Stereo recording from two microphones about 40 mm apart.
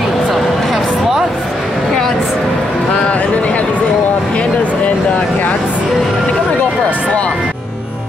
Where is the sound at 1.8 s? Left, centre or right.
Centre.